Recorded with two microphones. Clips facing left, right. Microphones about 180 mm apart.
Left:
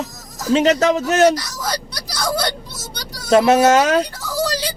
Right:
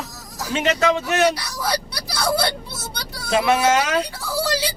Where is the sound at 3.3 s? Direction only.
45° left (ahead or behind).